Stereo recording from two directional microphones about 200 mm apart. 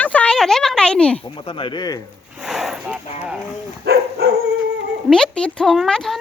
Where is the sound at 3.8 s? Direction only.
55° right (ahead or behind).